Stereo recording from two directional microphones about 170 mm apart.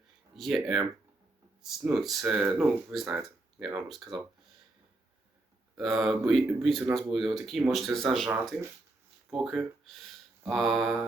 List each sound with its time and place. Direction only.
0.3 s speech: centre (ahead or behind)
5.7 s speech: centre (ahead or behind)